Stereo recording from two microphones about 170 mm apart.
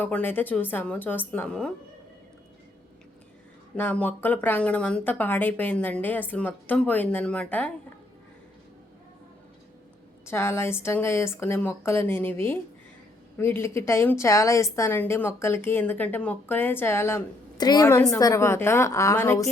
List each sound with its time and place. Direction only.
0.0 s a woman's voice: 10° left (ahead or behind)
3.8 s a woman's voice: 10° left (ahead or behind)
10.2 s a woman's voice: 15° left (ahead or behind)